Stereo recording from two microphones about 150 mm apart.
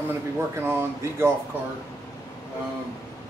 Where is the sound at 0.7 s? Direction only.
15° right (ahead or behind).